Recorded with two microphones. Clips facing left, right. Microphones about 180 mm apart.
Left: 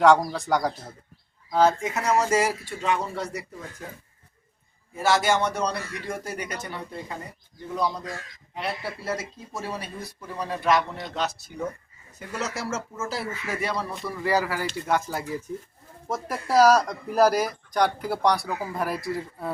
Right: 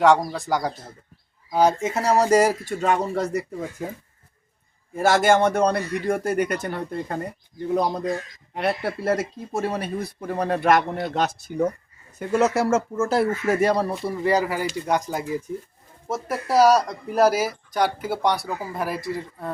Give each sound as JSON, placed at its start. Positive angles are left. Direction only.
{"t": 0.0, "sound": "speech", "side_deg": 0}
{"t": 1.5, "sound": "a woman's voice", "side_deg": -15}
{"t": 1.9, "sound": "speech", "side_deg": -35}
{"t": 4.9, "sound": "speech", "side_deg": -50}
{"t": 14.0, "sound": "speech", "side_deg": -25}
{"t": 16.0, "sound": "speech", "side_deg": 0}